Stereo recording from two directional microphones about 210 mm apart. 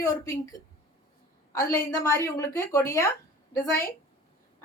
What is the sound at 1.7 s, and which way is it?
A woman's voice, 15° left (ahead or behind).